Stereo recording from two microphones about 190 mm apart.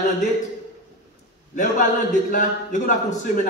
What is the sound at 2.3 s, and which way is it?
A man's voice, 40° left (ahead or behind).